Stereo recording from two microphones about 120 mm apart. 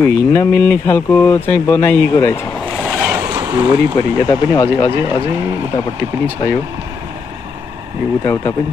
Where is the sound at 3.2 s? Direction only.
20° right (ahead or behind).